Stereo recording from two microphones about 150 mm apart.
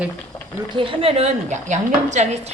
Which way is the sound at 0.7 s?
35° right (ahead or behind).